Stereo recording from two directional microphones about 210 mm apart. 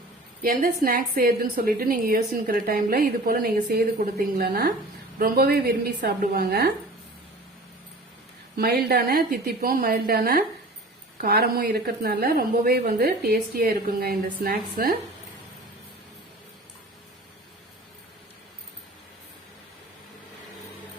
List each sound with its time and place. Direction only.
0.4 s a woman's voice: 45° right (ahead or behind)
8.5 s a woman's voice: 45° right (ahead or behind)